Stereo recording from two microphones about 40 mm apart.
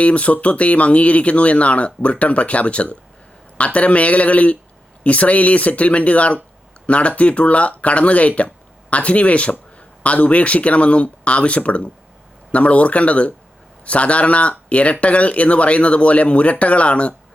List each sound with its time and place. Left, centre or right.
0.0 s speech: left